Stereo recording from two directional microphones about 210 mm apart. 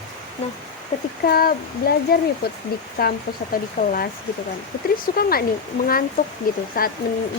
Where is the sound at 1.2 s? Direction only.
45° left (ahead or behind).